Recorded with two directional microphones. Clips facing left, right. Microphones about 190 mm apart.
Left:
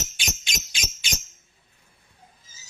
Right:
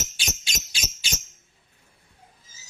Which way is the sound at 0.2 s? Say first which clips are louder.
Left 1 dB; 35° right (ahead or behind).